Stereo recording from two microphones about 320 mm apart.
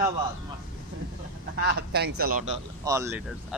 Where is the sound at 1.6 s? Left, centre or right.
Right.